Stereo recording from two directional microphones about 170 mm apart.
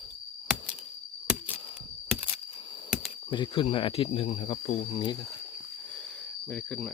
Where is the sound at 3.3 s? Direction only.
25° left (ahead or behind).